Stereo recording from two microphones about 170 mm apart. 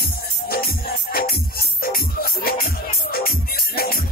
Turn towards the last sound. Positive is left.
turn(degrees=65)  # may be behind; listen again after turning